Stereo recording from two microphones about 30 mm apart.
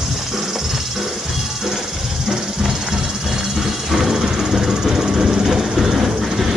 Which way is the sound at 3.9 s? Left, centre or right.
Centre.